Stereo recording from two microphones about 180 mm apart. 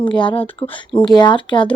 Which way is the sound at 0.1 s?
25° left (ahead or behind).